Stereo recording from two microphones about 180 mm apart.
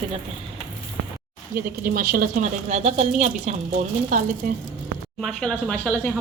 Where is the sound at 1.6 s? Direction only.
50° right (ahead or behind).